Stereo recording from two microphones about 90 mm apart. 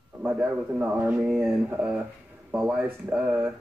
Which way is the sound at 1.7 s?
15° right (ahead or behind).